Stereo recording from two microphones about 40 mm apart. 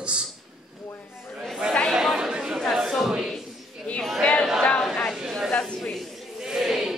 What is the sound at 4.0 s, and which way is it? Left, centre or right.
Chatter, centre.